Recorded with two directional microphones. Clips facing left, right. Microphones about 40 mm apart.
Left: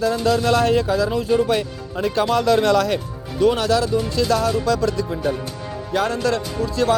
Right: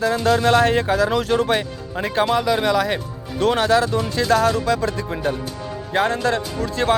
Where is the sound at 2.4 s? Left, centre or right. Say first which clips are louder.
Left 2 dB; centre.